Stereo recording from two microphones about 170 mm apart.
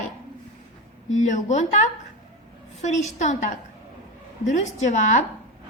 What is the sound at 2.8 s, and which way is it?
Speech, 45° left (ahead or behind).